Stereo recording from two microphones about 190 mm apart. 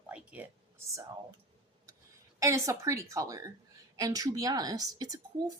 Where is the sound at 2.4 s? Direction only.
15° right (ahead or behind).